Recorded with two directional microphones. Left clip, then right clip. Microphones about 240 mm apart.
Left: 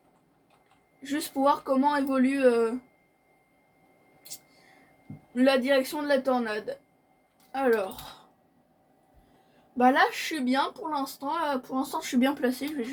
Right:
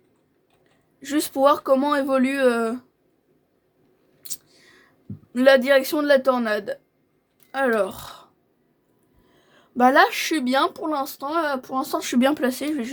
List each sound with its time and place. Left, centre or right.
1.0 s speech: right
5.3 s speech: right
9.7 s speech: right